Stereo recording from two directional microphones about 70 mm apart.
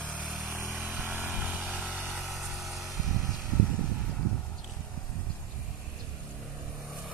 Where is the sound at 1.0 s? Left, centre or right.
Right.